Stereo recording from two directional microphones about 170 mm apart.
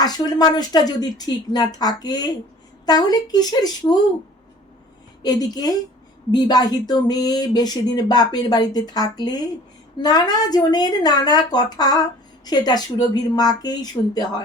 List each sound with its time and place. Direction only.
0.0 s speech: 25° left (ahead or behind)
5.2 s speech: 25° left (ahead or behind)